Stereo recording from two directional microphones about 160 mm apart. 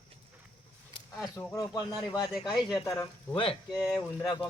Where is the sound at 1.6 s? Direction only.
20° left (ahead or behind).